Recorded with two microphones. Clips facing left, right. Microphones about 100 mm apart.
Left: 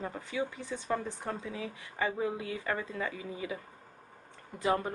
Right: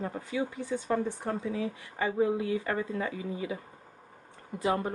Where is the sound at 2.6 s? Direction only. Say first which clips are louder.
Right 3 dB; 35° right (ahead or behind).